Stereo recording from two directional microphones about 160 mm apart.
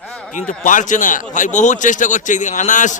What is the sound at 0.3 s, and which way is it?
A man's voice, 55° left (ahead or behind).